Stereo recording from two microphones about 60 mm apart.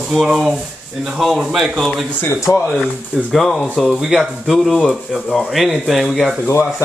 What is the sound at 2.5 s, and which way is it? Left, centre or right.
Speech, left.